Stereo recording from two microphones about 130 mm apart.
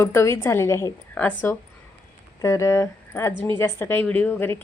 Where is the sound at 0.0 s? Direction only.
20° left (ahead or behind).